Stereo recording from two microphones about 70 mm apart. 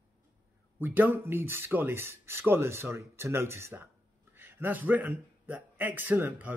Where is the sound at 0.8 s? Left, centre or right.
Right.